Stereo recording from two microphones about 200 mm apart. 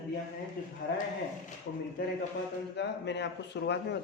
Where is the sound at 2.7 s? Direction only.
60° left (ahead or behind).